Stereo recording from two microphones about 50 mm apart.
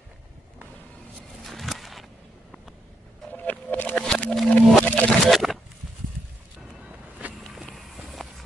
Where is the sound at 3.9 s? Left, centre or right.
Centre.